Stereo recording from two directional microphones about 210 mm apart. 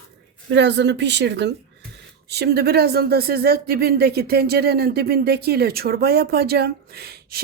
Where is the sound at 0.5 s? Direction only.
55° right (ahead or behind).